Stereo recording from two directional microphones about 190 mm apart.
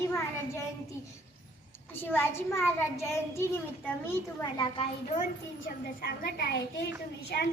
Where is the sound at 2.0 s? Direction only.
10° left (ahead or behind).